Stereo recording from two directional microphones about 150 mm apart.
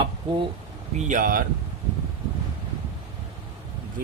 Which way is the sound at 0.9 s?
55° right (ahead or behind).